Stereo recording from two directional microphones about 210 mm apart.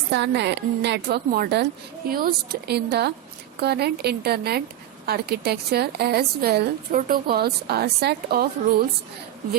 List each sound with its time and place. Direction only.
0.1 s a woman's voice: 55° right (ahead or behind)